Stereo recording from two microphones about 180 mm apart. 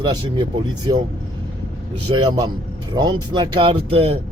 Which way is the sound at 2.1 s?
25° right (ahead or behind).